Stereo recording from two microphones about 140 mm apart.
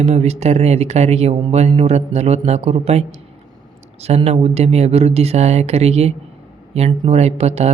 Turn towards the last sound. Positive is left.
turn(degrees=-50)  # may be behind; listen again after turning